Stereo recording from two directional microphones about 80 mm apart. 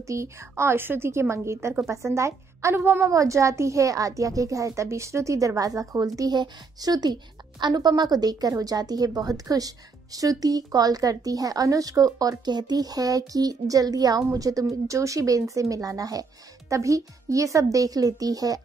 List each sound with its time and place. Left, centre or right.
0.0 s a woman's voice: right
3.1 s a woman's voice: right
6.3 s a woman's voice: right